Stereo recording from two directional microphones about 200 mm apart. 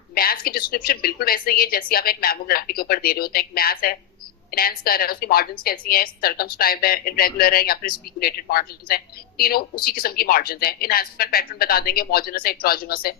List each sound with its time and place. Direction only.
0.1 s a woman's voice: 50° left (ahead or behind)